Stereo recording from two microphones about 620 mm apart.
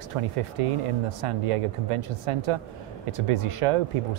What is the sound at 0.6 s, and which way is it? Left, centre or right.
Speech, right.